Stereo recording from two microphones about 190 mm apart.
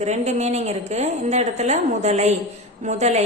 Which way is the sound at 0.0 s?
35° right (ahead or behind).